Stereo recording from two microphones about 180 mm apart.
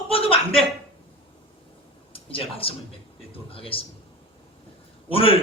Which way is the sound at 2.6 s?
30° left (ahead or behind).